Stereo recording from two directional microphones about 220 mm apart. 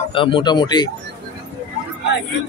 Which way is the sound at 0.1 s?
25° left (ahead or behind).